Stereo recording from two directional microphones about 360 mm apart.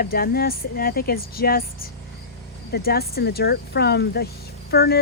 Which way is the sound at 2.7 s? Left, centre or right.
Left.